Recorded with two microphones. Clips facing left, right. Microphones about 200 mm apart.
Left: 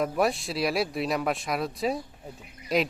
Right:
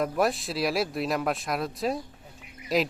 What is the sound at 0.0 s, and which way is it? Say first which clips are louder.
A man's voice: even; centre (ahead or behind).